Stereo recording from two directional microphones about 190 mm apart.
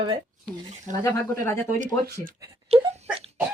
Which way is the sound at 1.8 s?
45° right (ahead or behind).